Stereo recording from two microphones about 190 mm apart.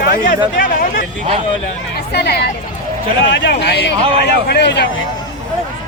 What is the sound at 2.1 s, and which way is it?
Speech, 60° left (ahead or behind).